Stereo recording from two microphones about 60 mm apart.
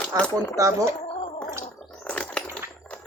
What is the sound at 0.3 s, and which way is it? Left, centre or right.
Speech, right.